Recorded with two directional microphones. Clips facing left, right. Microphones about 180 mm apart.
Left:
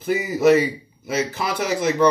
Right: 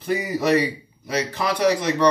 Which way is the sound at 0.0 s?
5° left (ahead or behind).